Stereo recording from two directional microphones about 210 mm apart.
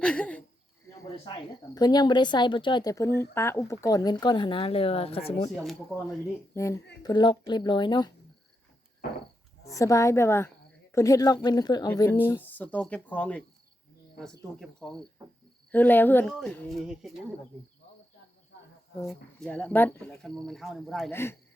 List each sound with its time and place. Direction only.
0.0 s a sound: 5° left (ahead or behind)
1.1 s a woman's voice: 25° left (ahead or behind)
5.5 s speech: centre (ahead or behind)
6.5 s a woman's voice: 15° left (ahead or behind)
9.6 s a woman's voice: 15° left (ahead or behind); by 17.2 s centre (ahead or behind)
19.0 s speech: 5° left (ahead or behind)
21.1 s speech: 10° left (ahead or behind)